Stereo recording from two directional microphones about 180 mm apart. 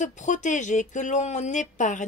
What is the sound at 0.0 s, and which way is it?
Speech, 45° left (ahead or behind).